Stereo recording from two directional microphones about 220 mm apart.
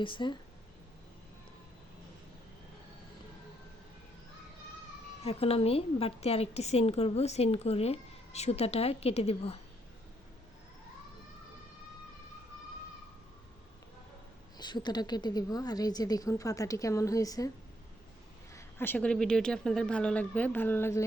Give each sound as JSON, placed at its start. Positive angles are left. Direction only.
{"t": 0.0, "sound": "a woman's voice", "side_deg": 20}
{"t": 5.2, "sound": "a woman's voice", "side_deg": 25}
{"t": 14.6, "sound": "a woman's voice", "side_deg": 20}
{"t": 18.5, "sound": "speech", "side_deg": 10}